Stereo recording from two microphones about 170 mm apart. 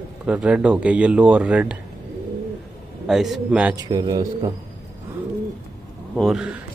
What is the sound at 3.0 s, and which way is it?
Speech, centre (ahead or behind).